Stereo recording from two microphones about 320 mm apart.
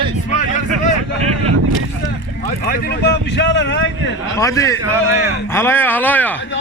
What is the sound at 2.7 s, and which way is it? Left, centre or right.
Speech, left.